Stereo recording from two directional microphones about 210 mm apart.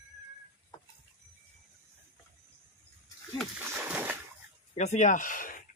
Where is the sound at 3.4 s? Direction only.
5° right (ahead or behind).